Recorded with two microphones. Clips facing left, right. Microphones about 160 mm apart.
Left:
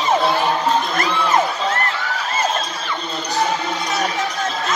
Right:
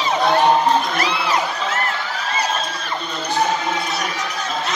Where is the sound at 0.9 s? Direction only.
45° left (ahead or behind).